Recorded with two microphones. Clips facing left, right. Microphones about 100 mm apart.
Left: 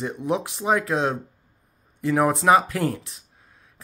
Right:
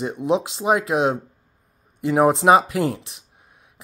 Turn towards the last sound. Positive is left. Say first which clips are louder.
# right 3 dB
turn(degrees=-20)  # may be behind; listen again after turning